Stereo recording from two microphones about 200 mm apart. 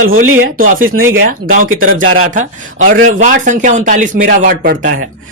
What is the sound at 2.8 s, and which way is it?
Speech, 40° right (ahead or behind).